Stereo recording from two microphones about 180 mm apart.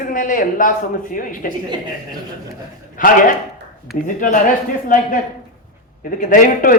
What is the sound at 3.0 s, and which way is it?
A man's voice, 50° left (ahead or behind).